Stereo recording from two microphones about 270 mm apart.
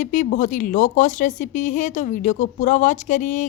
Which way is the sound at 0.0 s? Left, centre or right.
Left.